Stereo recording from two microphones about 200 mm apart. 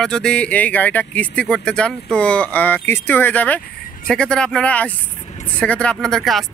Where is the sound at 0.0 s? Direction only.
5° left (ahead or behind).